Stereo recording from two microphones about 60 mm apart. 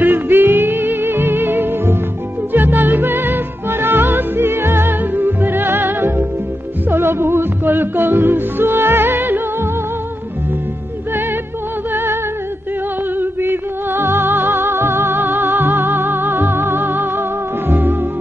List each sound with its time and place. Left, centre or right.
0.0 s music: right
11.9 s music: right
13.2 s music: right